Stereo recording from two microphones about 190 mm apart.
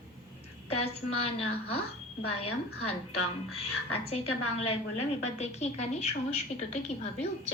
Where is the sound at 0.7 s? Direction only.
30° left (ahead or behind).